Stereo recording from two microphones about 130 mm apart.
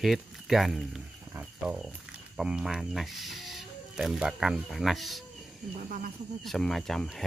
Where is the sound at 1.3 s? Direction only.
10° right (ahead or behind).